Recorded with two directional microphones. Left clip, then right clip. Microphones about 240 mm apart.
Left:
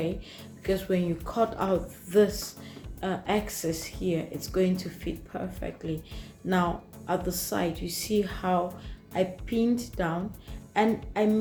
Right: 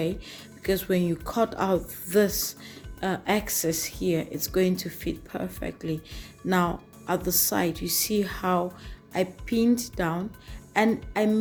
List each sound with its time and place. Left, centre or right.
0.0 s speech: right